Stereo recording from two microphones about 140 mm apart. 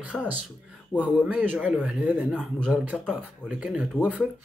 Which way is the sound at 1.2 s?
5° right (ahead or behind).